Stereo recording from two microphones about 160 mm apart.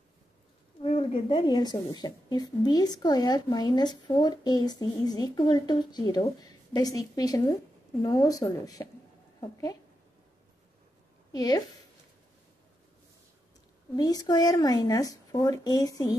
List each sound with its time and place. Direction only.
0.8 s a woman's voice: 35° left (ahead or behind)
11.3 s a woman's voice: 25° left (ahead or behind)
13.9 s a woman's voice: 25° left (ahead or behind)